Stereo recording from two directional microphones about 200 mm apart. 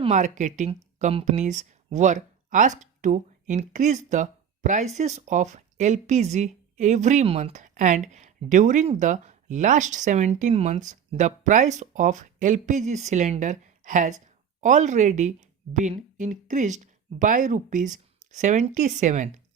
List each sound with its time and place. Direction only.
0.0 s a woman's voice: 35° right (ahead or behind)